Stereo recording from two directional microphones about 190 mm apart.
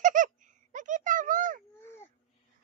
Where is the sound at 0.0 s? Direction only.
45° right (ahead or behind).